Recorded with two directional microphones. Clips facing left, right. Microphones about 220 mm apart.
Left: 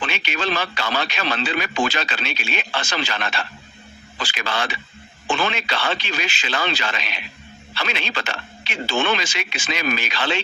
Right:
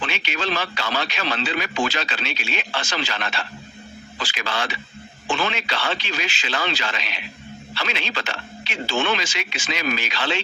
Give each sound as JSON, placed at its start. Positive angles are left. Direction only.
{"t": 0.1, "sound": "speech", "side_deg": 55}